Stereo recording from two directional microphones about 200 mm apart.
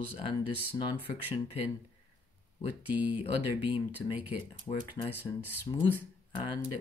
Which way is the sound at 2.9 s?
10° right (ahead or behind).